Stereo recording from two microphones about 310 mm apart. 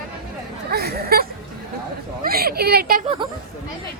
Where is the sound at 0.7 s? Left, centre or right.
Right.